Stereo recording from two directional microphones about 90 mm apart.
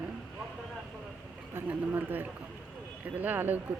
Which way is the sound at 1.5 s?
20° right (ahead or behind).